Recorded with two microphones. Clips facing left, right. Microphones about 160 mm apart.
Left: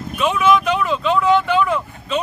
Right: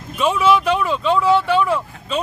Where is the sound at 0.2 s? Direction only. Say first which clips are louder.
Even; 30° right (ahead or behind).